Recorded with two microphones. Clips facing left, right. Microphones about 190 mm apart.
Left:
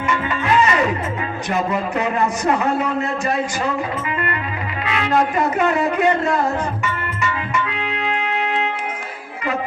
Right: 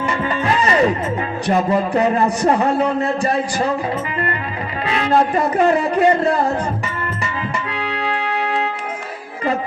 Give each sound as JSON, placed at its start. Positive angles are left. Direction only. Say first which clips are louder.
{"t": 0.0, "sound": "music", "louder": "right 2 dB", "side_deg": -35}
{"t": 1.5, "sound": "a man's voice", "louder": "right 5 dB", "side_deg": -35}
{"t": 4.9, "sound": "a man's voice", "louder": "right 2 dB", "side_deg": -35}
{"t": 6.8, "sound": "music", "louder": "left 1 dB", "side_deg": -35}